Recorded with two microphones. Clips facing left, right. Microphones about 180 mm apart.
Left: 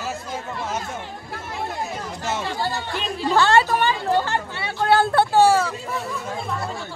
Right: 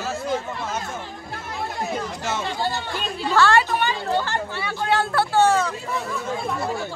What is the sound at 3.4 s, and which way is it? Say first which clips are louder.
Speech: left 1 dB; 25° left (ahead or behind).